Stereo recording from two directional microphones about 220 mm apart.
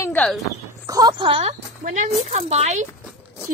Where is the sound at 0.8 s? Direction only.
15° right (ahead or behind).